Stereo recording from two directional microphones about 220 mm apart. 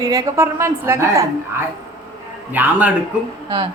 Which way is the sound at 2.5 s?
5° right (ahead or behind).